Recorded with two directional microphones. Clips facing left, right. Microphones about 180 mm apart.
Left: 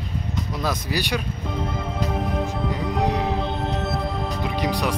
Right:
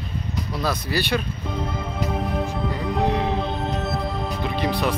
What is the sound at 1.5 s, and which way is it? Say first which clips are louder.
Music: even; centre (ahead or behind).